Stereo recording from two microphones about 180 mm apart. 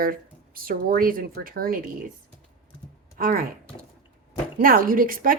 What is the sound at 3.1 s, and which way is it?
Speech, 55° right (ahead or behind).